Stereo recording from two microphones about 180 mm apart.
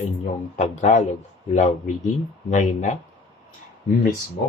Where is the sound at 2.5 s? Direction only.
45° left (ahead or behind).